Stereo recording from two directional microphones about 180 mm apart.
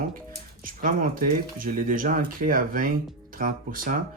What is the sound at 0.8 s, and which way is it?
Speech, 50° right (ahead or behind).